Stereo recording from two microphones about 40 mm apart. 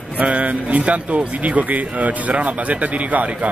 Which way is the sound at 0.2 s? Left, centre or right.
Right.